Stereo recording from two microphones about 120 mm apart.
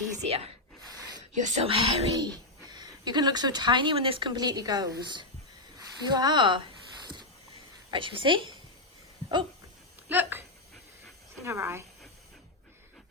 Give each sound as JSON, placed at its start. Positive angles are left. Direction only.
{"t": 0.2, "sound": "speech", "side_deg": -55}
{"t": 0.9, "sound": "a sound", "side_deg": -30}
{"t": 1.4, "sound": "speech", "side_deg": -90}
{"t": 1.6, "sound": "a woman's voice", "side_deg": -50}
{"t": 2.1, "sound": "speech", "side_deg": -35}
{"t": 7.9, "sound": "a woman's voice", "side_deg": -45}
{"t": 10.1, "sound": "speech", "side_deg": -15}
{"t": 11.4, "sound": "speech", "side_deg": -20}